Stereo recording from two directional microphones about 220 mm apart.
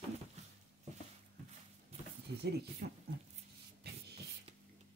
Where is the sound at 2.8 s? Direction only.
40° right (ahead or behind).